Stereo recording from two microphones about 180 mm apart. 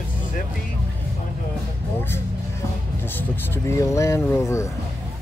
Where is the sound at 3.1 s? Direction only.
15° left (ahead or behind).